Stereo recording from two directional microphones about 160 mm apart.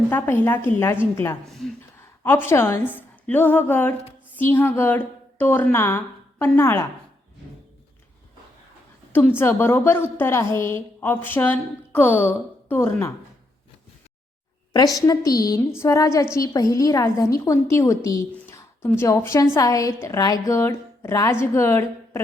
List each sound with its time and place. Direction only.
0.1 s a woman's voice: 15° left (ahead or behind)
9.1 s a woman's voice: 15° left (ahead or behind)
14.7 s a woman's voice: 25° left (ahead or behind)